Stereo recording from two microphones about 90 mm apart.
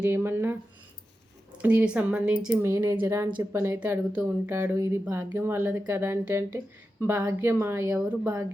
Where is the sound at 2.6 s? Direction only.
30° right (ahead or behind).